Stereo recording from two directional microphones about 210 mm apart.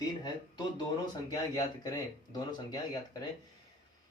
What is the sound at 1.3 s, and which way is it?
Speech, 20° left (ahead or behind).